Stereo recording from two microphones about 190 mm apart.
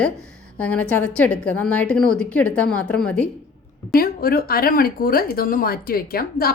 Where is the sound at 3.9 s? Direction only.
50° left (ahead or behind).